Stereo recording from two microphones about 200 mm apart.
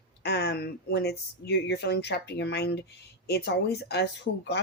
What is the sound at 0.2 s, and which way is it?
Speech, 55° left (ahead or behind).